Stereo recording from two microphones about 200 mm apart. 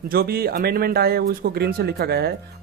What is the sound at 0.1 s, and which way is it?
Speech, 50° right (ahead or behind).